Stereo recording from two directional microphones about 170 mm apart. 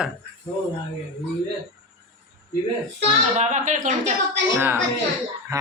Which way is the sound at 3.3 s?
45° right (ahead or behind).